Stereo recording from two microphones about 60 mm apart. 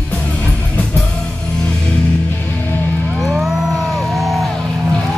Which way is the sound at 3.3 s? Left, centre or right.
Centre.